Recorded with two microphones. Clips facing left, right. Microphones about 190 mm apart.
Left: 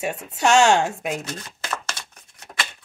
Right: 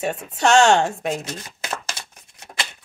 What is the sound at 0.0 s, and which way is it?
A woman's voice, 5° left (ahead or behind).